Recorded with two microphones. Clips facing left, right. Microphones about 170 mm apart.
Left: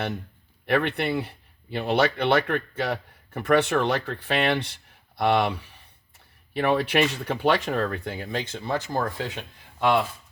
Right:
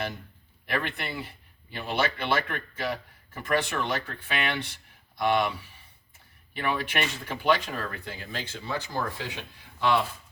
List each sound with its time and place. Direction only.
0.7 s speech: 65° left (ahead or behind); by 9.2 s 50° left (ahead or behind)